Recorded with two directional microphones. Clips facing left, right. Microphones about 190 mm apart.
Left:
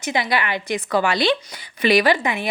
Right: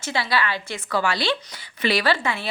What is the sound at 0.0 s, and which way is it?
A woman's voice, 20° left (ahead or behind).